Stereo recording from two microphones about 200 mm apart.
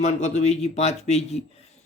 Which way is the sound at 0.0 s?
35° left (ahead or behind).